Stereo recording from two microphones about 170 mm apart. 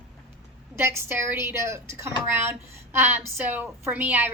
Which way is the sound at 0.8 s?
15° right (ahead or behind).